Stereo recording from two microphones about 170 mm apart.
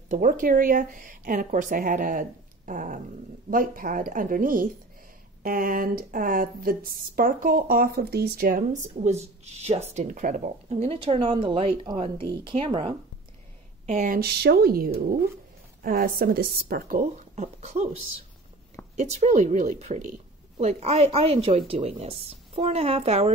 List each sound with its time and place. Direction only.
0.1 s a woman's voice: 50° right (ahead or behind); by 12.9 s 30° right (ahead or behind)
13.8 s a woman's voice: 50° right (ahead or behind)
17.4 s speech: 40° right (ahead or behind)
18.9 s speech: 45° right (ahead or behind)